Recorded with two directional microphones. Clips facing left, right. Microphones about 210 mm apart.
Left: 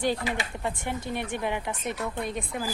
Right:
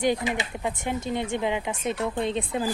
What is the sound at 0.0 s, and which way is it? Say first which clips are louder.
Speech: right 3 dB; 20° right (ahead or behind).